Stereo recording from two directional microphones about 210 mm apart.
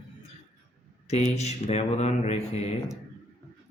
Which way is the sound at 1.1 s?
30° left (ahead or behind).